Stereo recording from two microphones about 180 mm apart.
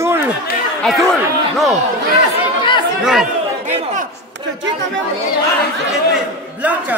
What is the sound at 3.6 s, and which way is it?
Chatter, 45° right (ahead or behind).